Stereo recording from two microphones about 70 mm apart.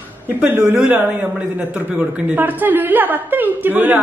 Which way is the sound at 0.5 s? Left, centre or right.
Right.